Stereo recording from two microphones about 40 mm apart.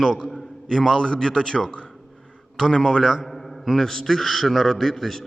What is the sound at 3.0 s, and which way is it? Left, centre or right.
A man's voice, centre.